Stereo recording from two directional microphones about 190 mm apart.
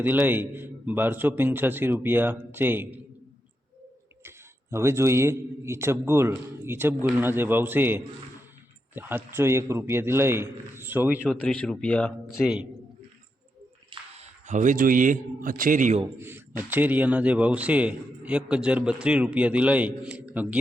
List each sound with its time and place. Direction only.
0.0 s a man's voice: 10° right (ahead or behind)
4.2 s a man's voice: 15° right (ahead or behind)
11.3 s speech: 5° left (ahead or behind)
13.9 s a man's voice: 35° right (ahead or behind)
16.6 s a man's voice: 10° right (ahead or behind)